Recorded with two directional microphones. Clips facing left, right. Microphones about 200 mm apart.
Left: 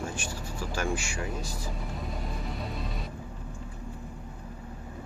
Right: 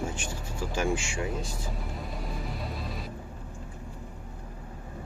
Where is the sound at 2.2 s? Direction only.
Centre (ahead or behind).